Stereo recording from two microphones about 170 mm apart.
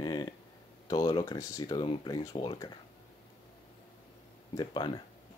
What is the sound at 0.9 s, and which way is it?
Speech, 25° left (ahead or behind).